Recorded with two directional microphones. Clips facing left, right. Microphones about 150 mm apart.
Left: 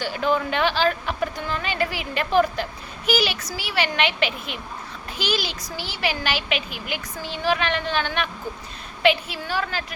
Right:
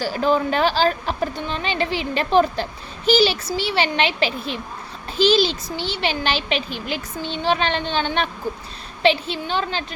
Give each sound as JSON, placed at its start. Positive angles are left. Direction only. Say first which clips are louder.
{"t": 0.0, "sound": "a woman's voice", "louder": "right 3 dB", "side_deg": -35}